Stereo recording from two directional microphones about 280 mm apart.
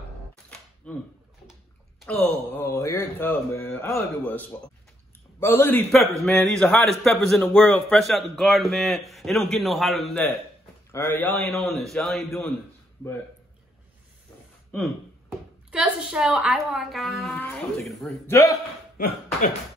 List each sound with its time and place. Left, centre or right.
0.8 s a man's voice: centre
15.7 s a man's voice: centre
18.9 s speech: left